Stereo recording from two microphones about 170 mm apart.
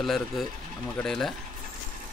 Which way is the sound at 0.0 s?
Centre (ahead or behind).